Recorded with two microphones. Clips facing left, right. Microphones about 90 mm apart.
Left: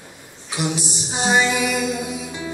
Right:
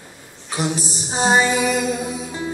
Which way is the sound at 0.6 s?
35° right (ahead or behind).